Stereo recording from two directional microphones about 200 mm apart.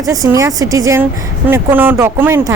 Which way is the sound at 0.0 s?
15° right (ahead or behind).